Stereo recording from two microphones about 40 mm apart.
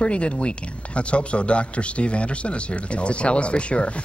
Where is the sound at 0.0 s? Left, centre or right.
Left.